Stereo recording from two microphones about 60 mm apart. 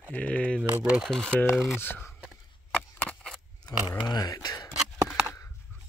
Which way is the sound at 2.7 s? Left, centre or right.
Left.